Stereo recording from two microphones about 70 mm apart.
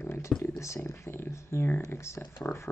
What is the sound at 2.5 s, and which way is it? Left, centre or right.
Speech, left.